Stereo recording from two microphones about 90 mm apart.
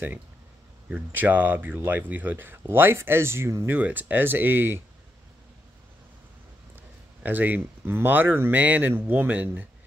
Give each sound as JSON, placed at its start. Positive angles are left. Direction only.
{"t": 0.8, "sound": "speech", "side_deg": -20}
{"t": 7.2, "sound": "speech", "side_deg": -20}